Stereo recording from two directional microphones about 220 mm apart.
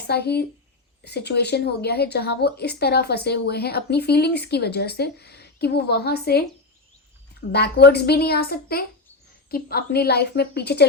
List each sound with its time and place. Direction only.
0.1 s a woman's voice: 50° left (ahead or behind)
7.5 s a woman's voice: 50° left (ahead or behind)